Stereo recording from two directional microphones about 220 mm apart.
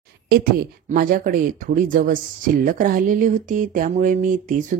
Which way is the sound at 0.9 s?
40° right (ahead or behind).